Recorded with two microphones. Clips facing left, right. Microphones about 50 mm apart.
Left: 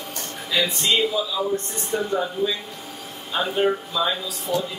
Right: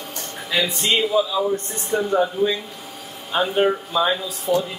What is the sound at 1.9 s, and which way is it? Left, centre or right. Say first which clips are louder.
Speech: right 4 dB; centre.